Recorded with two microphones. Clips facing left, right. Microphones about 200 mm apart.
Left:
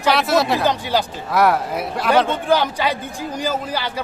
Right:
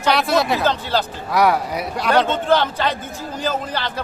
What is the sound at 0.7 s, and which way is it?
Speech, 15° left (ahead or behind).